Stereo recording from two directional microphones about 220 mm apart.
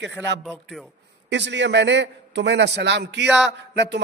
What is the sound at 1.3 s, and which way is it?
A man's voice, 55° right (ahead or behind).